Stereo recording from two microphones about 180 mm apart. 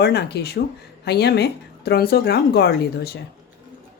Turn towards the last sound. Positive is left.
turn(degrees=65)  # may be behind; listen again after turning